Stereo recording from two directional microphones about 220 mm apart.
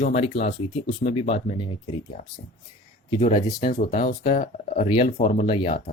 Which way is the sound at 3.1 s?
20° left (ahead or behind).